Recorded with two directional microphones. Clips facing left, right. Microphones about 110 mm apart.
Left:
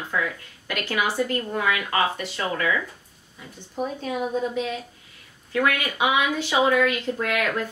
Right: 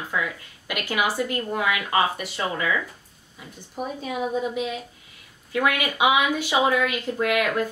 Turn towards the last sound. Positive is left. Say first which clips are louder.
# right 2 dB
turn(degrees=-15)  # may be behind; listen again after turning